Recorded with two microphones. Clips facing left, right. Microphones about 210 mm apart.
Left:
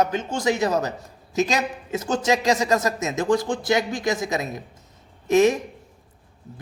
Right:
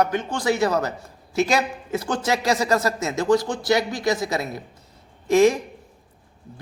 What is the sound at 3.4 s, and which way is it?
Speech, 55° left (ahead or behind).